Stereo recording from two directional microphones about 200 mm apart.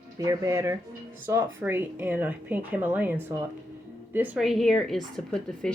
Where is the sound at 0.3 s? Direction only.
15° right (ahead or behind).